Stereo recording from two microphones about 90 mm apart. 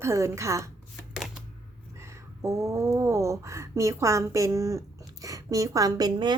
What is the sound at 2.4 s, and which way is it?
A woman's voice, 30° right (ahead or behind).